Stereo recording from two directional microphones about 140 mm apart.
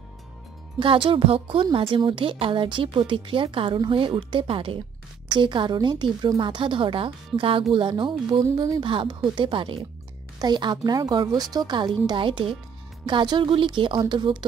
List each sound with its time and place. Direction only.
0.7 s speech: 35° right (ahead or behind)